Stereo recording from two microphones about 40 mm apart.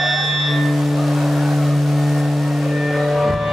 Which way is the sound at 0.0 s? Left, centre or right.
Centre.